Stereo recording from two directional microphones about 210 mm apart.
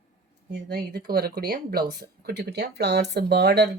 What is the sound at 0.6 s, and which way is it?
Speech, 50° right (ahead or behind).